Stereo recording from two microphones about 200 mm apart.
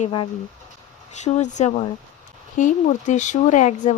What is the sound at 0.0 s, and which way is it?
Speech, 25° left (ahead or behind).